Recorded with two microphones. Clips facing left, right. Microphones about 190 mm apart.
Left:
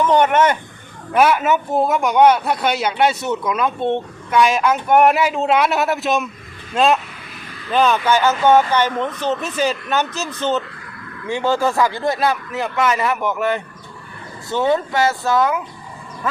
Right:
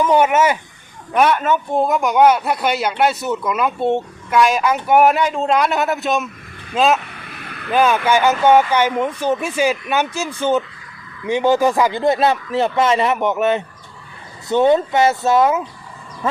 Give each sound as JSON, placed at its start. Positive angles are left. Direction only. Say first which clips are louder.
{"t": 0.0, "sound": "speech", "louder": "even", "side_deg": -5}
{"t": 1.1, "sound": "speech", "louder": "left 1 dB", "side_deg": 5}
{"t": 7.3, "sound": "vehicle", "louder": "right 4 dB", "side_deg": -65}
{"t": 7.7, "sound": "speech", "louder": "right 1 dB", "side_deg": -10}
{"t": 16.2, "sound": "a sound", "louder": "right 3 dB", "side_deg": -25}